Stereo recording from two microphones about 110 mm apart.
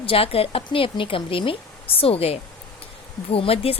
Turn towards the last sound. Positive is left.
turn(degrees=60)  # may be behind; listen again after turning